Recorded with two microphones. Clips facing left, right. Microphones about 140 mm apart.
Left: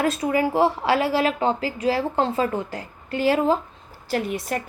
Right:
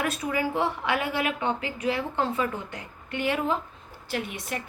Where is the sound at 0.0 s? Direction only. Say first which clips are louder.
Left 6 dB; 25° left (ahead or behind).